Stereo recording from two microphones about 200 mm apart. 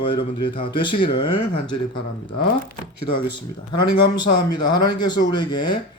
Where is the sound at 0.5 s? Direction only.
25° left (ahead or behind).